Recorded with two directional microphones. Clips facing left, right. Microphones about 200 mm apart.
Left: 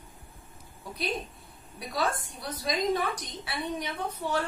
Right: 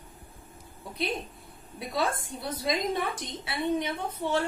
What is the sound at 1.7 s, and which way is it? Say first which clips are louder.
A woman's voice: right 1 dB; 25° right (ahead or behind).